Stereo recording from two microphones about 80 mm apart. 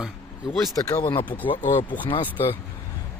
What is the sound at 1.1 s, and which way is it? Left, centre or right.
Speech, left.